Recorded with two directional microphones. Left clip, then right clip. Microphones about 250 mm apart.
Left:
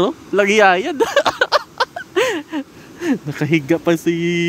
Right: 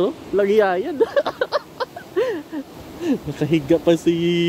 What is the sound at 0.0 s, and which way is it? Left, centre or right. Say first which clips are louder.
Speech: left 3 dB; left.